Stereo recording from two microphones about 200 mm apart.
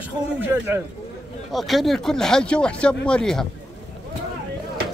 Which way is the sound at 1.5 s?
Centre (ahead or behind).